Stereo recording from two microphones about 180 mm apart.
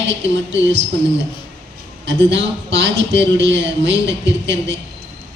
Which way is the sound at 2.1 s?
90° right.